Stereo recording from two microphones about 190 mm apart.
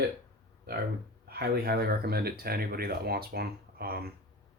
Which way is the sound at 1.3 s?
55° right (ahead or behind).